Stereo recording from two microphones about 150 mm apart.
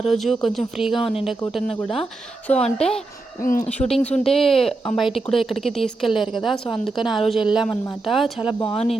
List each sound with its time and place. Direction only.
0.0 s a woman's voice: centre (ahead or behind)
3.4 s speech: 65° left (ahead or behind)
3.7 s a woman's voice: 5° left (ahead or behind)